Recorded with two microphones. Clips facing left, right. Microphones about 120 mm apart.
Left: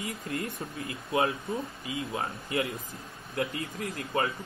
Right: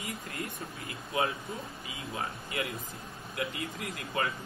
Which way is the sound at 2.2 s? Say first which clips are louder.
Left 2 dB; 35° left (ahead or behind).